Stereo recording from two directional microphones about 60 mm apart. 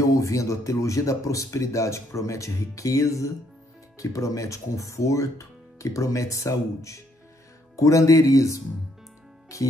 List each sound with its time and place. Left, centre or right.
0.0 s speech: left